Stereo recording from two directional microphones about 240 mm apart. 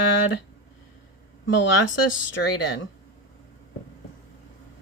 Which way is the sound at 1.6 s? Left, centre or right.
Left.